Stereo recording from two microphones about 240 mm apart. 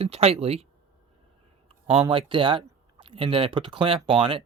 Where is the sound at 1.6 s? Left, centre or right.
Right.